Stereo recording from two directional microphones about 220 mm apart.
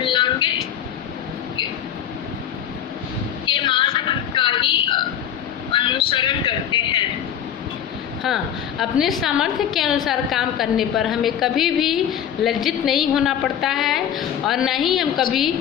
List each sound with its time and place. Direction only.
0.0 s vehicle: 20° left (ahead or behind)
3.4 s a sound: 20° left (ahead or behind)
5.7 s music: 20° left (ahead or behind)
8.2 s a woman's voice: centre (ahead or behind)